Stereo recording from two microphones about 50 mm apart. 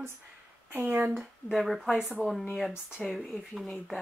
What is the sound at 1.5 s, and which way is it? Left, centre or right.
Speech, centre.